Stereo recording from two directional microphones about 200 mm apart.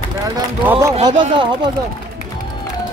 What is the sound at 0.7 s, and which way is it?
Run, 15° right (ahead or behind).